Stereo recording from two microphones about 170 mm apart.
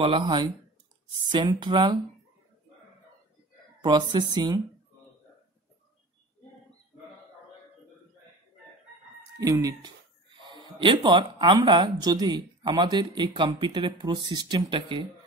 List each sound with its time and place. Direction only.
0.0 s speech: 30° right (ahead or behind)
3.8 s speech: 25° right (ahead or behind)
9.4 s speech: 20° right (ahead or behind)